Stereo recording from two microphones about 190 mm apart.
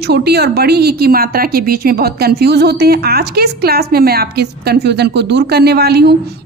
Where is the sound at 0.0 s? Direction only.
60° right (ahead or behind).